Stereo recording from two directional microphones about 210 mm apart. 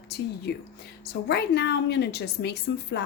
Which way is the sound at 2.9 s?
55° left (ahead or behind).